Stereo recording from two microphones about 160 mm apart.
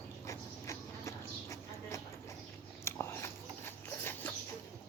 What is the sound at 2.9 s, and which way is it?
Biting, 15° left (ahead or behind).